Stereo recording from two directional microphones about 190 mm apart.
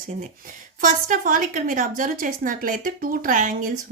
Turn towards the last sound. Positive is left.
turn(degrees=-45)  # may be behind; listen again after turning